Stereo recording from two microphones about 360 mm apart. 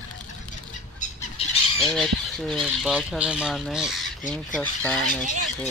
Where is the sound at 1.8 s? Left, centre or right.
Centre.